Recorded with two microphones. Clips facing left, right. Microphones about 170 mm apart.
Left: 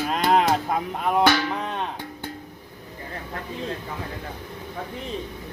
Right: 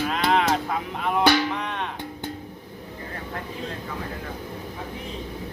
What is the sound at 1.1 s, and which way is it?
Speech, 35° left (ahead or behind).